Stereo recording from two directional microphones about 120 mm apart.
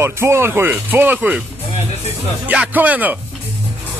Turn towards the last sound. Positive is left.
turn(degrees=-15)  # may be behind; listen again after turning